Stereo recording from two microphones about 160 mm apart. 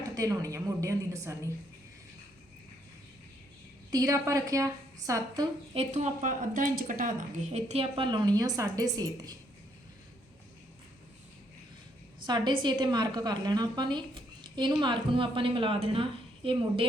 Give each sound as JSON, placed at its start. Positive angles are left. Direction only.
{"t": 0.1, "sound": "a woman's voice", "side_deg": -20}
{"t": 3.9, "sound": "a woman's voice", "side_deg": -20}
{"t": 5.7, "sound": "a woman's voice", "side_deg": -45}
{"t": 12.2, "sound": "a woman's voice", "side_deg": -30}